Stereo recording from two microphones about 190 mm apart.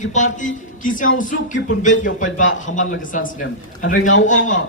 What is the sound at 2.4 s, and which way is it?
Speech, 85° left.